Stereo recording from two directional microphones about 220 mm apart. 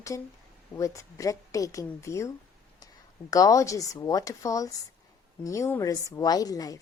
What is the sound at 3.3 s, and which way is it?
Speech, 15° left (ahead or behind).